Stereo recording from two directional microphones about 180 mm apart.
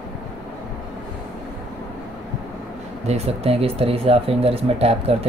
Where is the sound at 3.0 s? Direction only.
35° right (ahead or behind).